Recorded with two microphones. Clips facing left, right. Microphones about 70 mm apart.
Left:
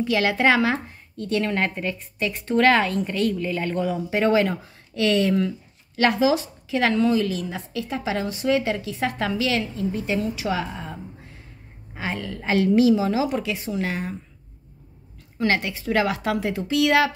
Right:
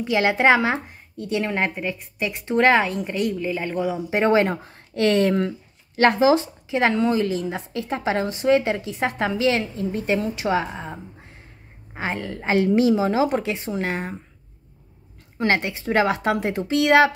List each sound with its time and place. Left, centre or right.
0.0 s a woman's voice: right
4.1 s a woman's voice: right
15.3 s a woman's voice: right